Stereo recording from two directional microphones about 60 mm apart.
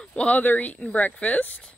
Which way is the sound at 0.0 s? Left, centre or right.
Centre.